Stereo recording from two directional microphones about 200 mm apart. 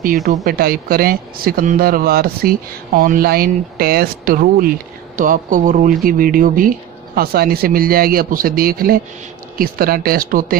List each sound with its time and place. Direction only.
0.2 s speech: 35° right (ahead or behind)